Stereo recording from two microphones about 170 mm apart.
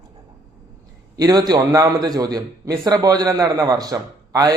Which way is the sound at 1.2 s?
25° right (ahead or behind).